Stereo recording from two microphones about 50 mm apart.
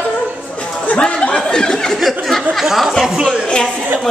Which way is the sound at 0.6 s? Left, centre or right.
Left.